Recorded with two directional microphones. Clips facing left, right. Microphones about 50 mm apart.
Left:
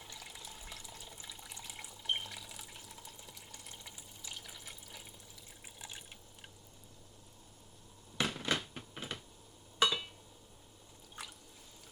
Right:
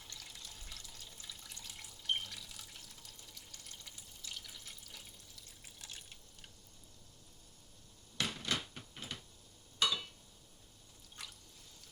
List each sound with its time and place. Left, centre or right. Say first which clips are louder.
0.0 s water: left 3 dB; centre
5.6 s drip: left 3 dB; centre
8.2 s a sound: left 3 dB; left
11.2 s drip: left 3 dB; centre